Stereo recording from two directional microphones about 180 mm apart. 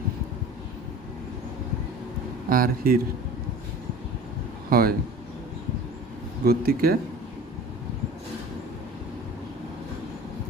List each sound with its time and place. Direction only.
2.5 s speech: 55° right (ahead or behind)
4.7 s speech: 55° right (ahead or behind)
6.4 s speech: 60° right (ahead or behind)